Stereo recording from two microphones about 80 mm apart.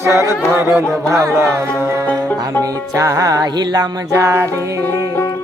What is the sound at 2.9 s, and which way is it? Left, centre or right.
Music, right.